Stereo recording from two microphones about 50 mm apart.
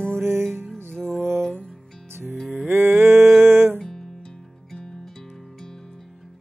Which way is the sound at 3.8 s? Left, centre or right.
Centre.